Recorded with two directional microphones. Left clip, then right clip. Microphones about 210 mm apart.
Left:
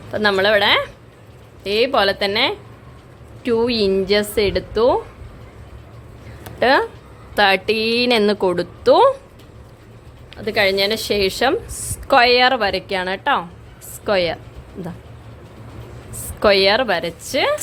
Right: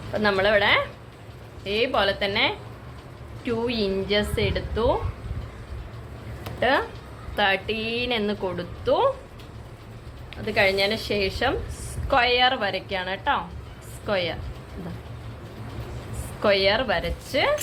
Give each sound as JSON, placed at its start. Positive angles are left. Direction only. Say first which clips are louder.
{"t": 0.1, "sound": "a woman's voice", "louder": "left 5 dB", "side_deg": 50}
{"t": 6.6, "sound": "a woman's voice", "louder": "left 7 dB", "side_deg": 55}
{"t": 10.4, "sound": "a woman's voice", "louder": "left 4 dB", "side_deg": 50}
{"t": 16.4, "sound": "a woman's voice", "louder": "left 7 dB", "side_deg": 50}